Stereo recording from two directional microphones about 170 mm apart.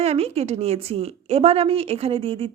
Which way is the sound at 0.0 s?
35° right (ahead or behind).